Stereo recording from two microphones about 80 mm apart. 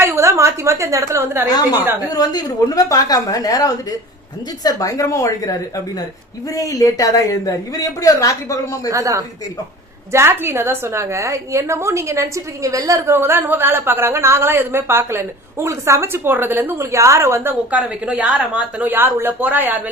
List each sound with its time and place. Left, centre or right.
0.0 s a woman's voice: right
2.0 s a woman's voice: left
8.9 s a woman's voice: right
13.1 s a woman's voice: right